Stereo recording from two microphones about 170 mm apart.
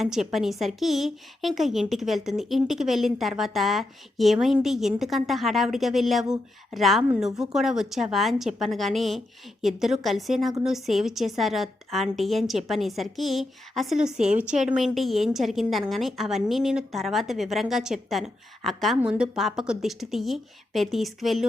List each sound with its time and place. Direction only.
0.0 s a woman's voice: centre (ahead or behind)